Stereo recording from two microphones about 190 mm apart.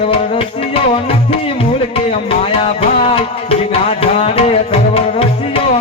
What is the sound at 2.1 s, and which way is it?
Music, 30° left (ahead or behind).